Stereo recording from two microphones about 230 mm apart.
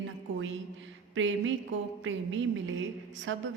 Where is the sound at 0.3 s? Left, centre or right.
Right.